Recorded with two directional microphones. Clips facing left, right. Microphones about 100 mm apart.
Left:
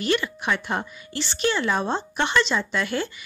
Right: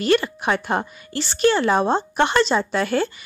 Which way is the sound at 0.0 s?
45° right (ahead or behind).